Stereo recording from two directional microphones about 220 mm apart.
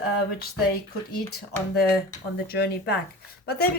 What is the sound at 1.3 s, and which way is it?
Speech, 45° left (ahead or behind).